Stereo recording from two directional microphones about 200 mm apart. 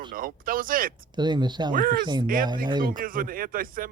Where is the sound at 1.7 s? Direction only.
45° right (ahead or behind).